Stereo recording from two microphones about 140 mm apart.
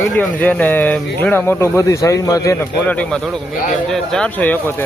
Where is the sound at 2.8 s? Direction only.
10° left (ahead or behind).